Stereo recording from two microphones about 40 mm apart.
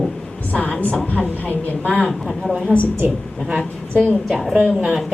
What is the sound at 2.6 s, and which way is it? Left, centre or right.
Speech, left.